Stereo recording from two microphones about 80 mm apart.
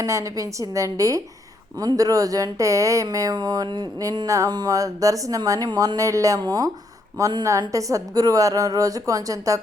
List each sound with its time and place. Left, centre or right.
0.0 s a woman's voice: right
4.3 s speech: right
7.7 s speech: right